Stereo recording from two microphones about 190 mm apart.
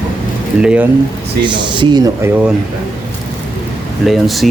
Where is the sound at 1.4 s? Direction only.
25° right (ahead or behind).